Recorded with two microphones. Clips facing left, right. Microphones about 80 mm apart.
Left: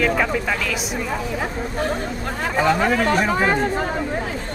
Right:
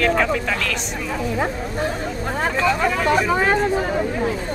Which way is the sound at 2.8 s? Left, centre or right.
Left.